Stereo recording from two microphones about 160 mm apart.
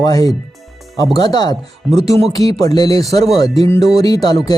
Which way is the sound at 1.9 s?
40° right (ahead or behind).